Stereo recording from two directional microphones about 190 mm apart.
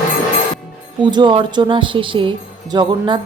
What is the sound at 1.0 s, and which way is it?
Speech, 25° right (ahead or behind).